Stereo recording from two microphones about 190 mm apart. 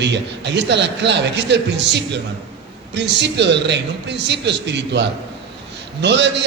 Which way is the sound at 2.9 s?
65° right (ahead or behind).